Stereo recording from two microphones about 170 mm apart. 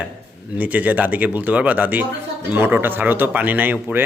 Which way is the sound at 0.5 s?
10° right (ahead or behind).